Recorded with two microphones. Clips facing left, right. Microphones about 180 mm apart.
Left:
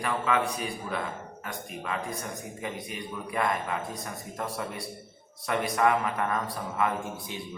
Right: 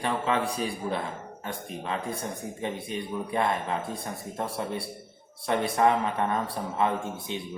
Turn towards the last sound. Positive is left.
turn(degrees=-25)  # may be behind; listen again after turning